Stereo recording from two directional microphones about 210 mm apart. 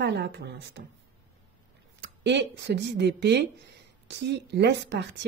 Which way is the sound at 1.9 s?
55° right (ahead or behind).